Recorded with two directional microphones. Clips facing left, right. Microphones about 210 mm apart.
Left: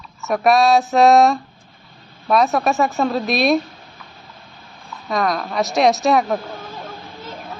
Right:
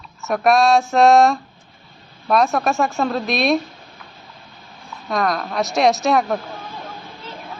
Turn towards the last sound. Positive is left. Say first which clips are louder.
# left 1 dB
turn(degrees=0)  # may be behind; listen again after turning